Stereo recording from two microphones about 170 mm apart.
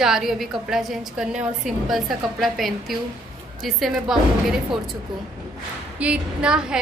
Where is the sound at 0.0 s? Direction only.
Centre (ahead or behind).